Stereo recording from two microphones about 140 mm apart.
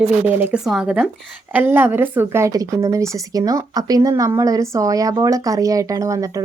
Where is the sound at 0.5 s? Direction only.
5° right (ahead or behind).